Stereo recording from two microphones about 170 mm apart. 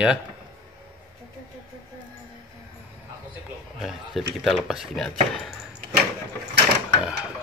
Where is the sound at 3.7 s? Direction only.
Centre (ahead or behind).